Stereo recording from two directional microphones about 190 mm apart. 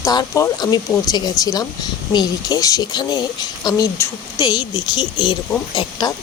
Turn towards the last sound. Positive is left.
turn(degrees=20)  # may be behind; listen again after turning